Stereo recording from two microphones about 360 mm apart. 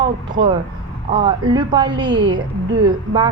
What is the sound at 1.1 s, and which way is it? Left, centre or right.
A woman's voice, centre.